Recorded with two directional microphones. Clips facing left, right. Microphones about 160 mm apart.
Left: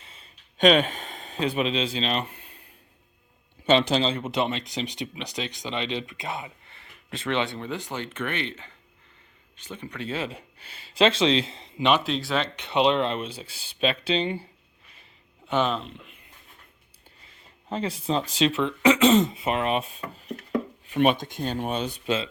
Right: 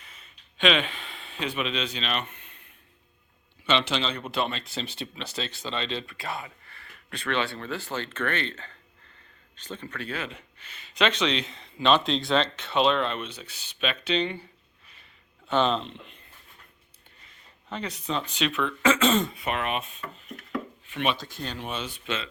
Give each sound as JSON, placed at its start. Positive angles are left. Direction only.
{"t": 0.0, "sound": "a sound", "side_deg": 30}
{"t": 0.6, "sound": "speech", "side_deg": 45}
{"t": 3.7, "sound": "speech", "side_deg": 40}
{"t": 4.1, "sound": "speech", "side_deg": 20}
{"t": 11.9, "sound": "speech", "side_deg": 10}
{"t": 15.4, "sound": "speech", "side_deg": 10}
{"t": 17.7, "sound": "speech", "side_deg": 30}